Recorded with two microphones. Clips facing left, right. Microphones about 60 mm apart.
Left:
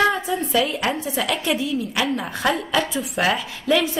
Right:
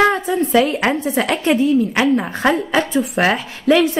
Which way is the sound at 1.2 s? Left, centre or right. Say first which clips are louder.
Right 8 dB; right.